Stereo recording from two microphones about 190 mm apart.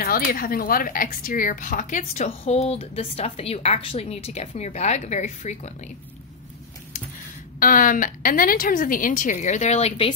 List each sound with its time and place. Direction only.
0.0 s speech: 50° left (ahead or behind)
7.6 s a woman's voice: 45° left (ahead or behind)